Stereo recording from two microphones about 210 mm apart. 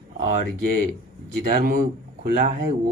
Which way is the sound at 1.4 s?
45° right (ahead or behind).